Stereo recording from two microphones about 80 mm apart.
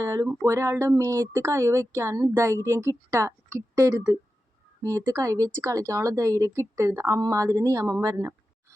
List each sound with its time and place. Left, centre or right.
0.0 s speech: right